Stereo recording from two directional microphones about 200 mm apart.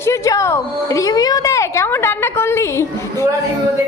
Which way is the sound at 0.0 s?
15° left (ahead or behind).